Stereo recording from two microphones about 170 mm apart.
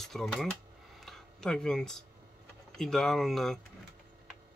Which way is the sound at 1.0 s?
5° left (ahead or behind).